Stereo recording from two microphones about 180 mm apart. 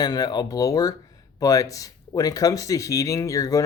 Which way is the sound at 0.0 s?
20° left (ahead or behind).